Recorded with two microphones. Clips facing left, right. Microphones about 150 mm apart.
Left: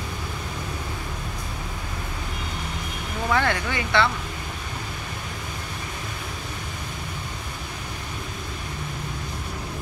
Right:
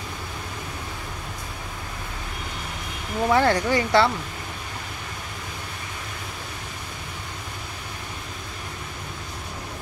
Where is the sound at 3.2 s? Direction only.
30° right (ahead or behind).